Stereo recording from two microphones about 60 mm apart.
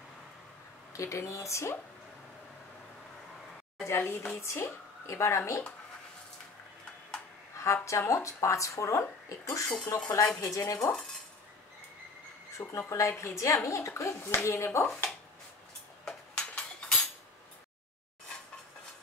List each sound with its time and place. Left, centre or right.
0.9 s speech: left
3.8 s speech: left
7.5 s speech: left
12.5 s speech: left
16.1 s cutlery: centre